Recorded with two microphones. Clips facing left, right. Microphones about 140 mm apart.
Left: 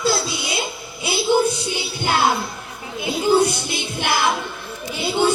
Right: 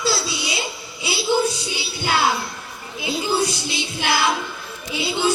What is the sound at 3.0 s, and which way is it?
Music, 55° left (ahead or behind).